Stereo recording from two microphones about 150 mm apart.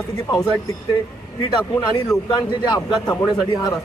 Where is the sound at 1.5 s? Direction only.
25° left (ahead or behind).